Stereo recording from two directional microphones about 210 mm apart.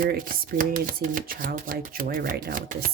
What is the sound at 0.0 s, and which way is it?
Speech, 40° right (ahead or behind).